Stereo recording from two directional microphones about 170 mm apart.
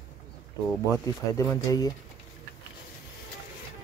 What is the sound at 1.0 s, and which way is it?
Speech, 20° left (ahead or behind).